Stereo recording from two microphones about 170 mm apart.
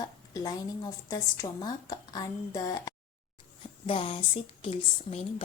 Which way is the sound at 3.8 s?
30° left (ahead or behind).